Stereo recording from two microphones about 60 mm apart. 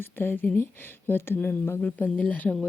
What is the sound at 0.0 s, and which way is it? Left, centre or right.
Speech, left.